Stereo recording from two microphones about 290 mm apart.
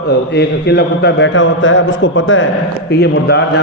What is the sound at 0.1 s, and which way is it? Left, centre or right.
A man's voice, left.